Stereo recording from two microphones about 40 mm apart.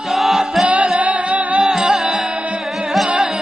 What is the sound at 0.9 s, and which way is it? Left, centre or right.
Music, right.